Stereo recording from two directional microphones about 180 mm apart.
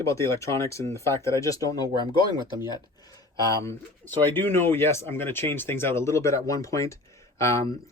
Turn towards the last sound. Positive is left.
turn(degrees=15)  # may be behind; listen again after turning